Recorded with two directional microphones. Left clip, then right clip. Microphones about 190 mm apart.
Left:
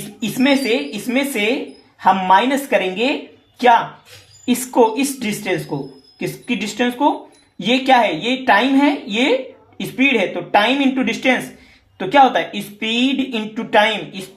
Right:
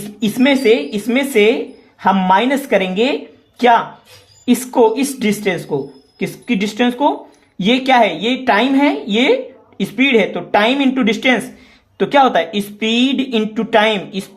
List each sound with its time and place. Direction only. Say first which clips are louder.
0.2 s speech: right 3 dB; 45° right (ahead or behind)
4.4 s speech: right 2 dB; 45° right (ahead or behind)